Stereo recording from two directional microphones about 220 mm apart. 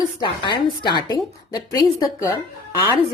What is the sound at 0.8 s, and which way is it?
Speech, 20° left (ahead or behind).